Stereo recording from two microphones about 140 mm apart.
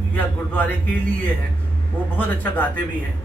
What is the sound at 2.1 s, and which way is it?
Speech, 10° left (ahead or behind).